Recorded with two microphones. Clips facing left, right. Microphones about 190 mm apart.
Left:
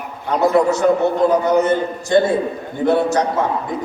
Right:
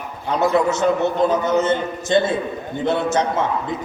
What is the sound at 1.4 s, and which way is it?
A man's voice, 20° right (ahead or behind).